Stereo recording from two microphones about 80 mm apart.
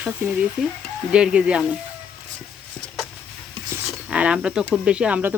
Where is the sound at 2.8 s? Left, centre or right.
Centre.